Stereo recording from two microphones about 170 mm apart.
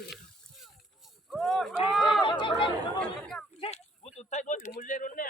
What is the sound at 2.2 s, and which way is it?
Speech, 30° left (ahead or behind).